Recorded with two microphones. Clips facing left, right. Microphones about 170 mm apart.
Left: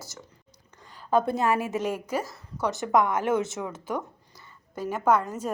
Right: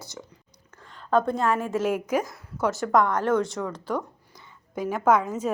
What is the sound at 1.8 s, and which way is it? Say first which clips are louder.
A woman's voice: right 4 dB; 10° right (ahead or behind).